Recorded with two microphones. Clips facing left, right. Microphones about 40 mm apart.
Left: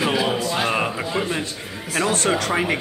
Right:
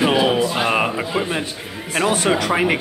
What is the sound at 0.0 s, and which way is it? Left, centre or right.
Music, right.